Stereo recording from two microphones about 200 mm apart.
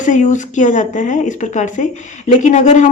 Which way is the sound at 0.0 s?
40° left (ahead or behind).